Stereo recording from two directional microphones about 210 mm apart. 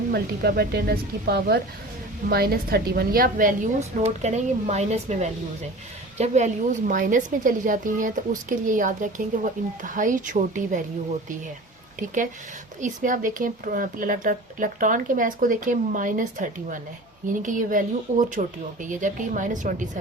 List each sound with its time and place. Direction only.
0.1 s a woman's voice: 50° right (ahead or behind)
11.9 s a woman's voice: 40° right (ahead or behind)